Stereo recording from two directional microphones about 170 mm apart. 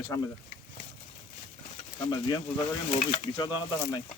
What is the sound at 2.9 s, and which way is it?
Speech, 40° left (ahead or behind).